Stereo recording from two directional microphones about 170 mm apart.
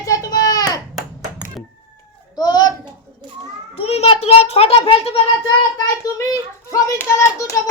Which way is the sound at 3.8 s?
35° left (ahead or behind).